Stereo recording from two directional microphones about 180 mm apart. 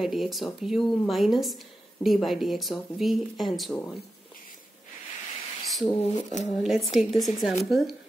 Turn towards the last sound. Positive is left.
turn(degrees=0)  # may be behind; listen again after turning